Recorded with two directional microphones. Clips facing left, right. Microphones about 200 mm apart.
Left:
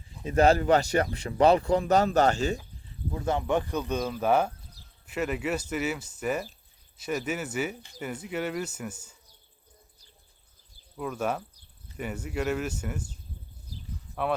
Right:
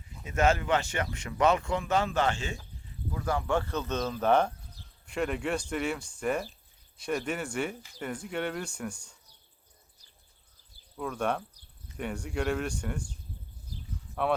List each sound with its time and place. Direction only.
0.3 s speech: 35° left (ahead or behind)
3.1 s speech: 25° left (ahead or behind); by 9.1 s 5° left (ahead or behind)
10.9 s speech: 5° left (ahead or behind)
13.9 s a sound: centre (ahead or behind)